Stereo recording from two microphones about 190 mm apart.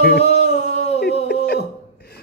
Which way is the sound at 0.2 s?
35° left (ahead or behind).